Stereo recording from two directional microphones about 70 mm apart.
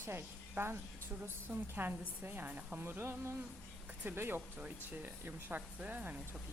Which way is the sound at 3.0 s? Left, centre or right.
Right.